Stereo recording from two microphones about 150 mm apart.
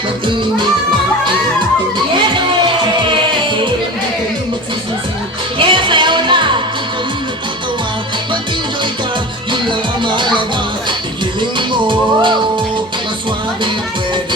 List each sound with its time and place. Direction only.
5.5 s music: 35° right (ahead or behind)
9.5 s music: 30° right (ahead or behind)